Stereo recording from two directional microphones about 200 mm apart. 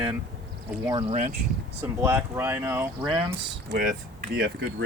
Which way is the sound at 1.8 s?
10° right (ahead or behind).